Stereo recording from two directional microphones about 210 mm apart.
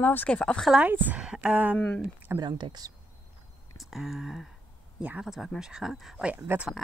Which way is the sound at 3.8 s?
Centre (ahead or behind).